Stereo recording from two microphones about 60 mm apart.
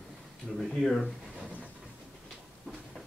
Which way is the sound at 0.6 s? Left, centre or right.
Centre.